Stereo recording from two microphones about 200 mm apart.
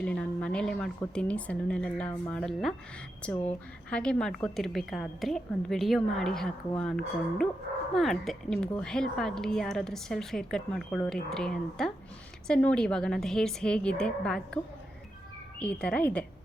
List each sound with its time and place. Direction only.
0.0 s a woman's voice: 5° left (ahead or behind)